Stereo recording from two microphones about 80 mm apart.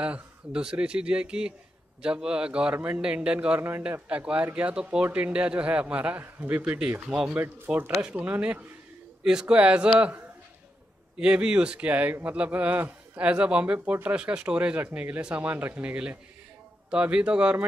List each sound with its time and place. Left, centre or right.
0.0 s a man's voice: centre
9.2 s a man's voice: centre